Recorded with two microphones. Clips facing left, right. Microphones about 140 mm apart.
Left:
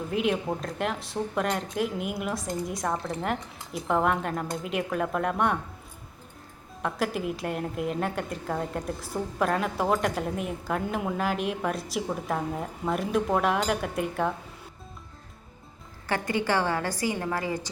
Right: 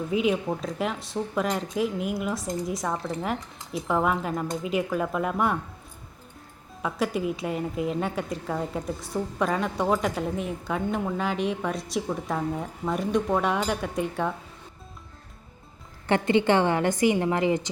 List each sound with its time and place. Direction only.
0.1 s a woman's voice: centre (ahead or behind)
6.8 s a woman's voice: centre (ahead or behind)
16.0 s a woman's voice: 25° right (ahead or behind)